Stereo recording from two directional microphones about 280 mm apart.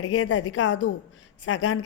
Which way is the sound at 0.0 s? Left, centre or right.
Left.